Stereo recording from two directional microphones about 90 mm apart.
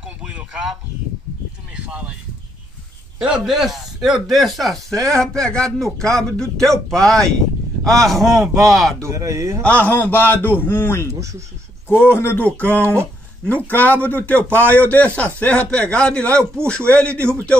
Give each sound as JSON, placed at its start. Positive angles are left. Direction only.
{"t": 1.9, "sound": "speech", "side_deg": -10}
{"t": 3.2, "sound": "a man's voice", "side_deg": -5}
{"t": 9.0, "sound": "speech", "side_deg": -35}
{"t": 9.6, "sound": "a man's voice", "side_deg": 15}
{"t": 11.1, "sound": "speech", "side_deg": -35}
{"t": 11.9, "sound": "a man's voice", "side_deg": 25}
{"t": 12.8, "sound": "speech", "side_deg": -30}
{"t": 13.5, "sound": "speech", "side_deg": 20}